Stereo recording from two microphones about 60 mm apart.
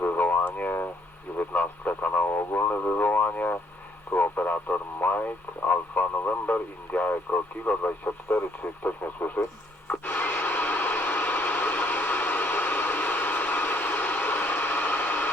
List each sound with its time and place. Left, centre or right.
0.0 s a sound: left
1.4 s speech: left
9.8 s vehicle: left